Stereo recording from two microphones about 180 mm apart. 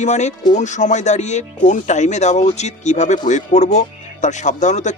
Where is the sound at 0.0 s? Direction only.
40° left (ahead or behind).